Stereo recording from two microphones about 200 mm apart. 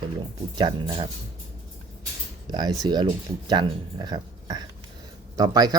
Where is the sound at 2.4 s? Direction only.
20° right (ahead or behind).